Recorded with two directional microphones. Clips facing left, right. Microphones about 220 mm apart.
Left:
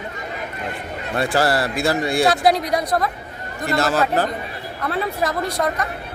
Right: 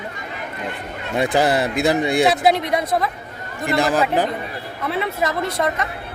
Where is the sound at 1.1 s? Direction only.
20° right (ahead or behind).